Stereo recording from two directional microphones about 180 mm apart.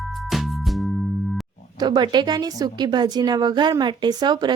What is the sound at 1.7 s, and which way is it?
Speech, 25° right (ahead or behind).